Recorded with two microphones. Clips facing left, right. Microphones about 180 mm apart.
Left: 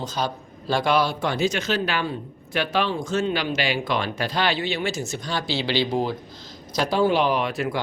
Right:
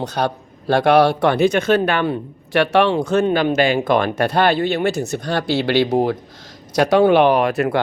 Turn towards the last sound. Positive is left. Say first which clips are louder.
# right 8 dB
turn(degrees=-65)  # may be behind; listen again after turning